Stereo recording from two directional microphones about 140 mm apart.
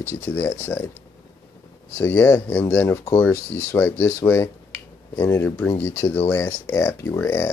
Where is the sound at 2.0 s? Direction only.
15° left (ahead or behind).